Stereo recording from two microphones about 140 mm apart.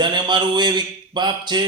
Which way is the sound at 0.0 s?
30° right (ahead or behind).